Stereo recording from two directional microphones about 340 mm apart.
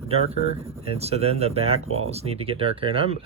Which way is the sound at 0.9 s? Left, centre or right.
Centre.